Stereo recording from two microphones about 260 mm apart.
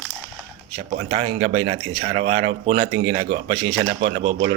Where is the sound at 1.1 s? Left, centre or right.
Right.